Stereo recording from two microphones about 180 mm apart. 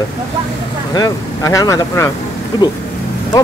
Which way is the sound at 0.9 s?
20° left (ahead or behind).